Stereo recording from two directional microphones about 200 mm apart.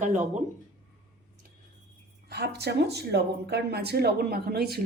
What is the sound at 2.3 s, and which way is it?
Speech, 55° right (ahead or behind).